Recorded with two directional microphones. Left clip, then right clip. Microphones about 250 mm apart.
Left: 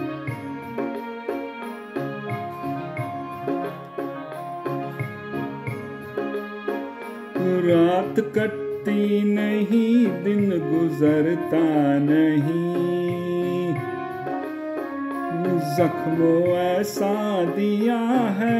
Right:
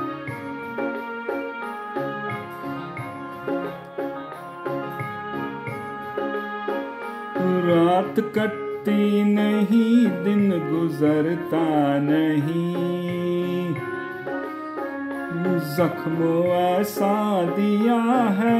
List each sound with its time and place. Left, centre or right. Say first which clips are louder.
6.1 s music: right 1 dB; left
7.4 s music: left 1 dB; centre
13.0 s music: left 1 dB; right
15.8 s music: left 2 dB; centre